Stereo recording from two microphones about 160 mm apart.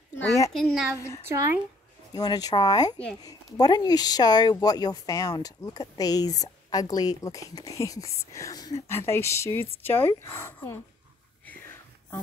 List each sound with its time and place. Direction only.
0.5 s a woman's voice: 5° left (ahead or behind)
0.9 s speech: 20° left (ahead or behind)
1.3 s speech: 20° right (ahead or behind)
2.1 s speech: 25° left (ahead or behind)